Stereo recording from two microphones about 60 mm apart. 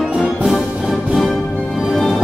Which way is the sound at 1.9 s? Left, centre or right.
Centre.